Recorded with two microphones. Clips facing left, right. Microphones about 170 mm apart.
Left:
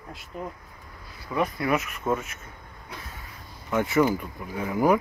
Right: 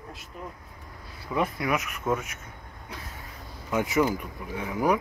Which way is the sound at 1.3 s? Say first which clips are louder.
Left 1 dB; 15° right (ahead or behind).